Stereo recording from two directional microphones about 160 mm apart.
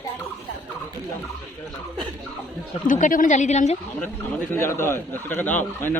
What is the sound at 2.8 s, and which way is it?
Speech, 55° left (ahead or behind).